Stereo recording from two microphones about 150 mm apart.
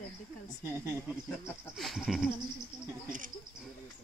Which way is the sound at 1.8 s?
Centre (ahead or behind).